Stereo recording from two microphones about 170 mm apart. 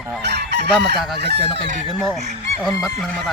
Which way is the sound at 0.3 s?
80° right.